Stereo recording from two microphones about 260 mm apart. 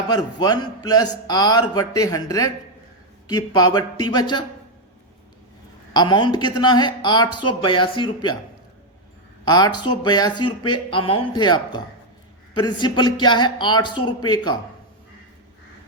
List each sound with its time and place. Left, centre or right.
0.1 s a man's voice: centre
5.9 s a man's voice: centre
9.5 s a man's voice: centre